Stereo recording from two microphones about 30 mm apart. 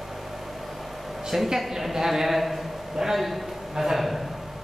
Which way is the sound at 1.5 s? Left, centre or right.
Centre.